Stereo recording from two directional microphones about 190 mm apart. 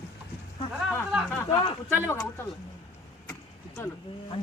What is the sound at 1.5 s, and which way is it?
Speech, 30° left (ahead or behind).